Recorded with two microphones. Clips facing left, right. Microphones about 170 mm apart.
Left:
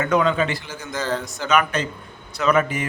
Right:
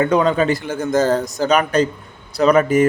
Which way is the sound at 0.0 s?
35° right (ahead or behind).